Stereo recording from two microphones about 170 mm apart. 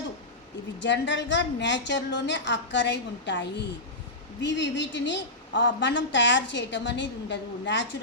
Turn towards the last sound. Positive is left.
turn(degrees=90)